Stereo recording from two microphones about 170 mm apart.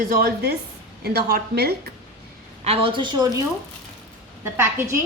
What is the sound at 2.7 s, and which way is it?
Speech, 30° right (ahead or behind).